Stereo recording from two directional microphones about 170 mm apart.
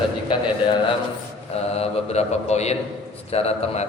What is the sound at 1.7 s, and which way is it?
A man's voice, 35° left (ahead or behind).